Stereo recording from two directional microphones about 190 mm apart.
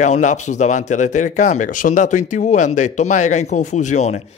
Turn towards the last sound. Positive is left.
turn(degrees=40)  # may be behind; listen again after turning